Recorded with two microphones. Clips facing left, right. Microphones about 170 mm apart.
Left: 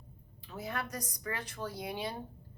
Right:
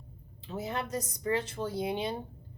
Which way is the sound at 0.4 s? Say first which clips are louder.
Right 4 dB; 25° right (ahead or behind).